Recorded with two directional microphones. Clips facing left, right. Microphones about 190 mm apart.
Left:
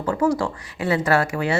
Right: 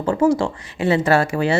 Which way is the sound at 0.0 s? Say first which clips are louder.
Right 4 dB; 25° right (ahead or behind).